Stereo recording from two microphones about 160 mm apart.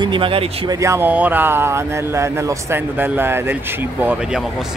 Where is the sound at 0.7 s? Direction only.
20° right (ahead or behind).